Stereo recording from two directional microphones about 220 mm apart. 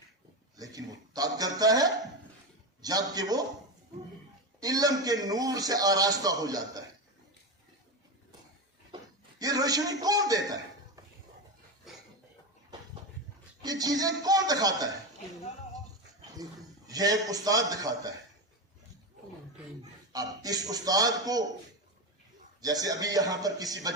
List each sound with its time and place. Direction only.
0.5 s a man's voice: 15° right (ahead or behind)
4.6 s a man's voice: 15° right (ahead or behind)
9.4 s a man's voice: 15° right (ahead or behind)
13.6 s a man's voice: 15° right (ahead or behind)
16.4 s a man's voice: 15° right (ahead or behind)
20.1 s a man's voice: 15° right (ahead or behind)
22.6 s a man's voice: 15° right (ahead or behind)